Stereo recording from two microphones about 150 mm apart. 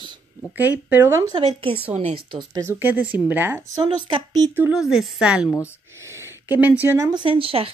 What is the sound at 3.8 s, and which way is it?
Speech, 30° right (ahead or behind).